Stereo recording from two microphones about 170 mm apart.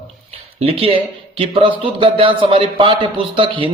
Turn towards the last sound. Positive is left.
turn(degrees=-30)  # may be behind; listen again after turning